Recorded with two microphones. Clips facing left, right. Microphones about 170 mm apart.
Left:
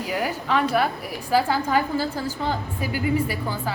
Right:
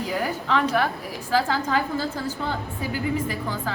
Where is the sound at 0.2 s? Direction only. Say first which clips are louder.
Left 1 dB; 10° left (ahead or behind).